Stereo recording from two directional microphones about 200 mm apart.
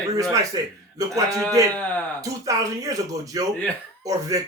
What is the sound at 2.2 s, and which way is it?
Speech, 15° right (ahead or behind).